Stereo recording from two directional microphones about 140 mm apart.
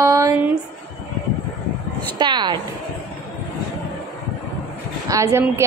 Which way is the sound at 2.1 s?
30° right (ahead or behind).